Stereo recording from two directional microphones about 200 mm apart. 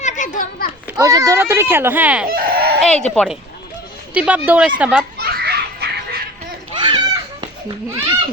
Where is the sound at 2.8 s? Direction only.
5° left (ahead or behind).